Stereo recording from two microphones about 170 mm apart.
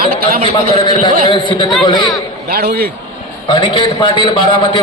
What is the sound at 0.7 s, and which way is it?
A man's voice, 25° left (ahead or behind).